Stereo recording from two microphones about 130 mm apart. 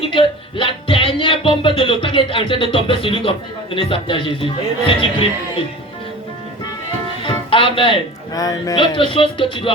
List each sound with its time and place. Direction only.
0.1 s speech: 40° left (ahead or behind)
7.3 s music: 45° left (ahead or behind)
8.3 s speech: 30° left (ahead or behind)
8.7 s speech: 40° left (ahead or behind)